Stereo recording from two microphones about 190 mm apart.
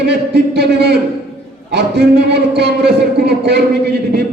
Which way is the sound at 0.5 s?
60° right (ahead or behind).